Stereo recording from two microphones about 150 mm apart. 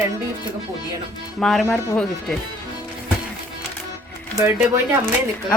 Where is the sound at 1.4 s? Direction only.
5° left (ahead or behind).